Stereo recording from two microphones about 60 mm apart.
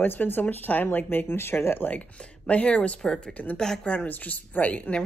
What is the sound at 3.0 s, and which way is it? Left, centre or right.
Speech, centre.